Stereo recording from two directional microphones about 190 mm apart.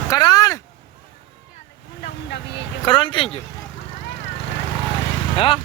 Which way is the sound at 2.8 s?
25° left (ahead or behind).